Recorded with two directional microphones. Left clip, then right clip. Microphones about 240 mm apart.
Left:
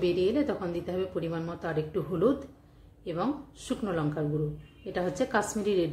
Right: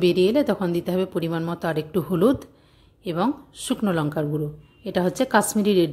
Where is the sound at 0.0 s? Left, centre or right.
Right.